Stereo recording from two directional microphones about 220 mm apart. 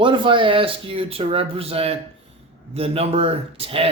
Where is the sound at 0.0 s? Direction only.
20° right (ahead or behind).